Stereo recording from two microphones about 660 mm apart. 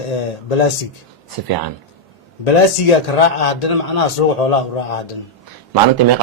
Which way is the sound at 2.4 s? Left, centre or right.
Left.